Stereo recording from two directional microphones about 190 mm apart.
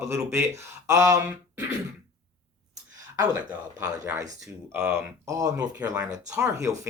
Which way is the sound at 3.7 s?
15° right (ahead or behind).